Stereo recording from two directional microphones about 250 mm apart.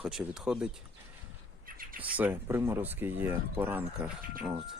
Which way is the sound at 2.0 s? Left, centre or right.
Centre.